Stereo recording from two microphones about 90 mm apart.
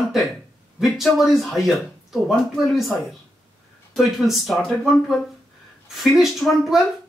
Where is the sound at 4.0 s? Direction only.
5° right (ahead or behind).